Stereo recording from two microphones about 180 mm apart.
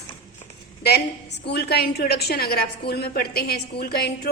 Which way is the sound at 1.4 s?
65° left (ahead or behind).